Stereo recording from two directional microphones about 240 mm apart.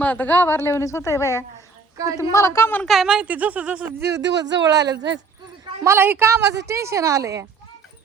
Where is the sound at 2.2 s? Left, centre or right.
Centre.